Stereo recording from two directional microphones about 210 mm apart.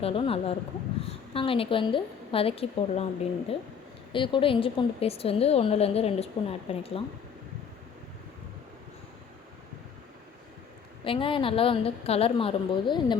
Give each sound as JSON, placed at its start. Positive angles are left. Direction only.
{"t": 0.0, "sound": "a woman's voice", "side_deg": 25}
{"t": 4.1, "sound": "a woman's voice", "side_deg": 25}
{"t": 11.0, "sound": "a woman's voice", "side_deg": 25}